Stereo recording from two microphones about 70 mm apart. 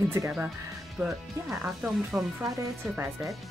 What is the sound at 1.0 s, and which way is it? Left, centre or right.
Speech, centre.